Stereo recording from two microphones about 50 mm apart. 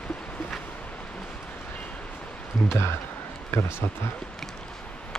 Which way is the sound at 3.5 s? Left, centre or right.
Left.